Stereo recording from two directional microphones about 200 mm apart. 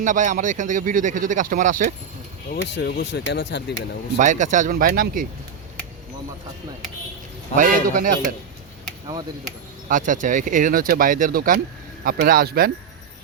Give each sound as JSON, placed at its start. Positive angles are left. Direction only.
{"t": 0.0, "sound": "speech", "side_deg": -40}
{"t": 2.6, "sound": "speech", "side_deg": 60}
{"t": 4.2, "sound": "speech", "side_deg": -40}
{"t": 7.5, "sound": "speech", "side_deg": -40}
{"t": 9.9, "sound": "speech", "side_deg": -40}